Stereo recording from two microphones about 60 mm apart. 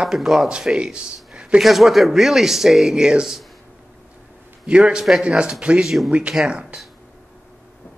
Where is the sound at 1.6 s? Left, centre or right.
Centre.